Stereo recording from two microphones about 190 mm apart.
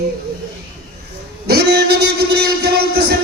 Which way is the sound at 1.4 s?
60° right (ahead or behind).